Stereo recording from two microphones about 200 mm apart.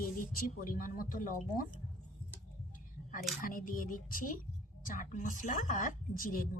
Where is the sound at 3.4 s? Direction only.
45° left (ahead or behind).